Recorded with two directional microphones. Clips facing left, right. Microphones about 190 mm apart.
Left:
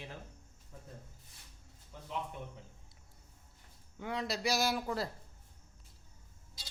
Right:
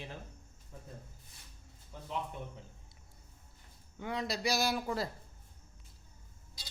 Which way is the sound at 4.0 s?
5° left (ahead or behind).